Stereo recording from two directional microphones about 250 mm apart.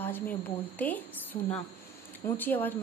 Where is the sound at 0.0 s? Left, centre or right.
Centre.